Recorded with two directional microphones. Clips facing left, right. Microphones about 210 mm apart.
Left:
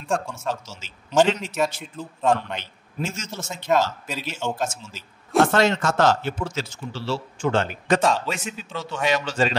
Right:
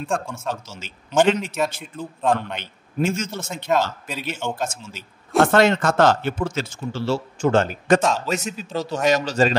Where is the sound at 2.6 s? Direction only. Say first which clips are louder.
Right 7 dB; 55° right (ahead or behind).